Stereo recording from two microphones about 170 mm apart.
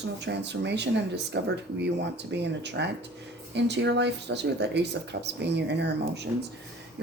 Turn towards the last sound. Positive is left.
turn(degrees=-90)